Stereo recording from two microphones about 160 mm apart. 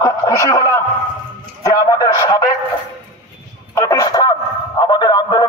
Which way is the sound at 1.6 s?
20° left (ahead or behind).